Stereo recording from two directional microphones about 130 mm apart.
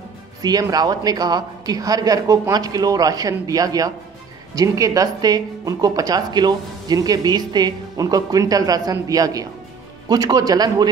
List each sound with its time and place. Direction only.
0.4 s speech: 30° right (ahead or behind)